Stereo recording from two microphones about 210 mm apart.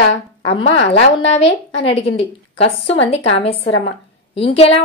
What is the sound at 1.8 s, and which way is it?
A woman's voice, 30° left (ahead or behind).